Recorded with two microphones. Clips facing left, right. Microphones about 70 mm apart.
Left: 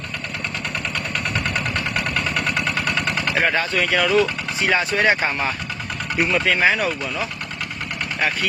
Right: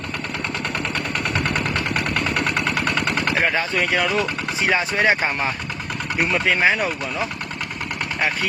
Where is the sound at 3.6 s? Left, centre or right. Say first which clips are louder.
Left 1 dB; centre.